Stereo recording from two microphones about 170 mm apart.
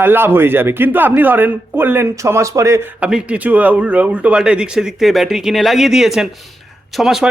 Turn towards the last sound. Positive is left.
turn(degrees=0)  # may be behind; listen again after turning